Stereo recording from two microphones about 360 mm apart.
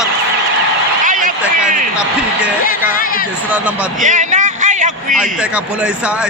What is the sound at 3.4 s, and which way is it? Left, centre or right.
Speech, centre.